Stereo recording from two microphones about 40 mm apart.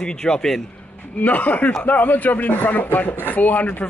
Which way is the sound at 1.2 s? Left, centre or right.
Left.